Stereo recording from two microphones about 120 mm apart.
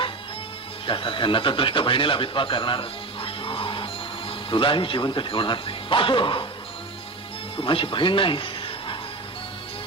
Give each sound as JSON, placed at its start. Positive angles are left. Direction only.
{"t": 0.9, "sound": "speech", "side_deg": 45}
{"t": 7.5, "sound": "speech", "side_deg": 45}